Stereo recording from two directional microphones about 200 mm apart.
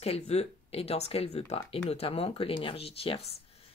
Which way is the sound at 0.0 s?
30° left (ahead or behind).